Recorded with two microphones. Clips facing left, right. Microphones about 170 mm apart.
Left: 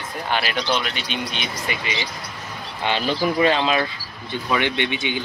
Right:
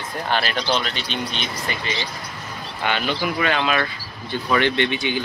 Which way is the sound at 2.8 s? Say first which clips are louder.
Left 2 dB; 30° left (ahead or behind).